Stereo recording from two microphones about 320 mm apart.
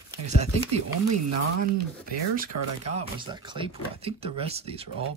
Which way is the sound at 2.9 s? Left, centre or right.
Centre.